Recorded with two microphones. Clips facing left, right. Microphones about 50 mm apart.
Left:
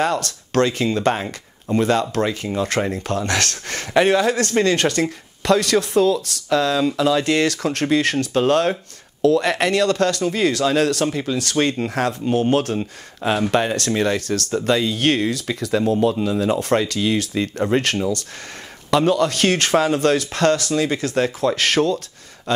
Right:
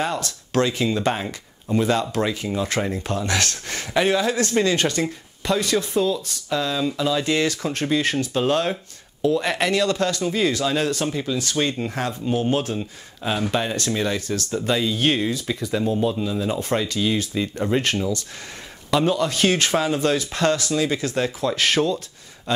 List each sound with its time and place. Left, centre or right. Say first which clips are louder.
0.0 s speech: left 4 dB; left
2.8 s speech: left 4 dB; centre
3.1 s speech: left 2 dB; left
5.4 s speech: left 5 dB; left
9.2 s speech: left 5 dB; left
9.5 s speech: left 3 dB; left
11.3 s speech: left 3 dB; left
18.9 s speech: left 3 dB; left